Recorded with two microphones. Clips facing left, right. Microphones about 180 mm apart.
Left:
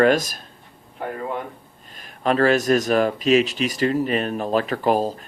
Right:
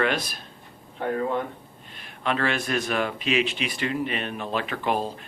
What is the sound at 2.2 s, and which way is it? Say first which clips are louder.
Speech: left 8 dB; 40° left (ahead or behind).